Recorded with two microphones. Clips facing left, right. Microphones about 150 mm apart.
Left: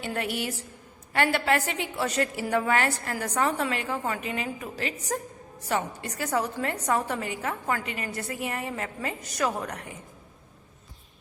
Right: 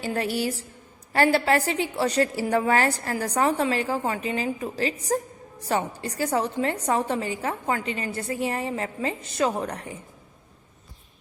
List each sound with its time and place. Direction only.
0.0 s a woman's voice: 35° right (ahead or behind)